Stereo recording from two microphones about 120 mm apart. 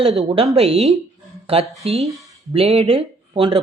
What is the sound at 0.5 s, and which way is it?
A woman's voice, 55° right (ahead or behind).